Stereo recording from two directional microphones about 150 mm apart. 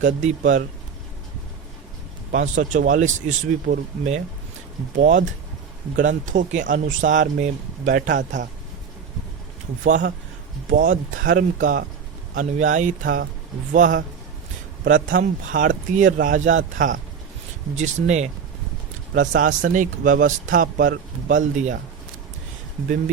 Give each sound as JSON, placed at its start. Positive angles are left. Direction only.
{"t": 0.0, "sound": "speech", "side_deg": -55}
{"t": 2.3, "sound": "speech", "side_deg": -60}
{"t": 4.9, "sound": "speech", "side_deg": -60}
{"t": 10.7, "sound": "speech", "side_deg": -65}
{"t": 17.7, "sound": "speech", "side_deg": -50}
{"t": 19.1, "sound": "speech", "side_deg": -60}